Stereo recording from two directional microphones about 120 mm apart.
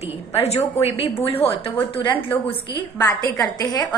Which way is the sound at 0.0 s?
60° left (ahead or behind).